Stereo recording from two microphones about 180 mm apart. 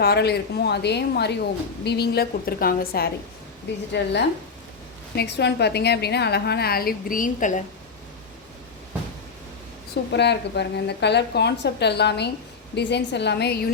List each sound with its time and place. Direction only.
0.0 s a woman's voice: 65° left (ahead or behind)
3.9 s a woman's voice: 70° left (ahead or behind); by 7.6 s 45° left (ahead or behind)
10.1 s a woman's voice: 70° left (ahead or behind)